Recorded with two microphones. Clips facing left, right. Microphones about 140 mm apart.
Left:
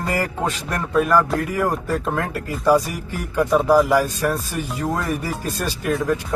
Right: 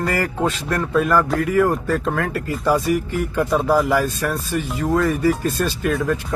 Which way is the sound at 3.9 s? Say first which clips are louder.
Left 1 dB; 15° left (ahead or behind).